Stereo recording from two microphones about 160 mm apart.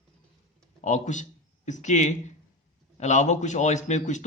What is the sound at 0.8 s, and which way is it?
Speech, 50° left (ahead or behind).